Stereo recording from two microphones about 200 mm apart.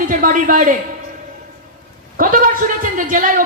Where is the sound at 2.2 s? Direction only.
40° right (ahead or behind).